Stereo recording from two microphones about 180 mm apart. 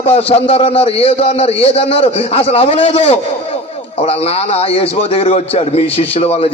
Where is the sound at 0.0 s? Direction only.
35° left (ahead or behind).